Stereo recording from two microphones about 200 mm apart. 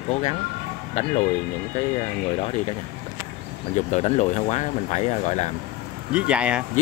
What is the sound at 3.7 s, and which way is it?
Speech, 35° left (ahead or behind).